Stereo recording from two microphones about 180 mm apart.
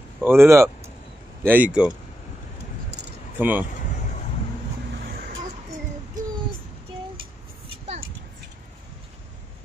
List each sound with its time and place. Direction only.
0.2 s speech: 15° right (ahead or behind)
3.3 s speech: 10° right (ahead or behind)
5.0 s vehicle: 55° right (ahead or behind)